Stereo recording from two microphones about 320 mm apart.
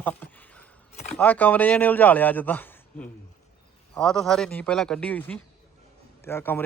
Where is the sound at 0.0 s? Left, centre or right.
Centre.